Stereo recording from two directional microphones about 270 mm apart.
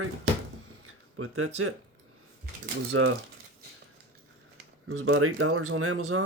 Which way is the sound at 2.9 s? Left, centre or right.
Right.